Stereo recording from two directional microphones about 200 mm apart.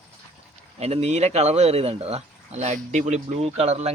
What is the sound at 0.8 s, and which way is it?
Speech, 30° right (ahead or behind).